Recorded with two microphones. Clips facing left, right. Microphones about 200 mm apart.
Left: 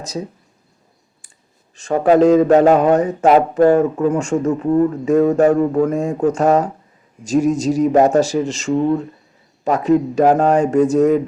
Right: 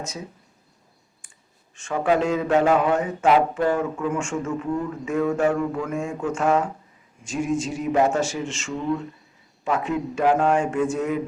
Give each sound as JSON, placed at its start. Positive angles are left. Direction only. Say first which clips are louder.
{"t": 0.0, "sound": "speech", "louder": "left 8 dB", "side_deg": 35}
{"t": 1.7, "sound": "speech", "louder": "left 8 dB", "side_deg": 40}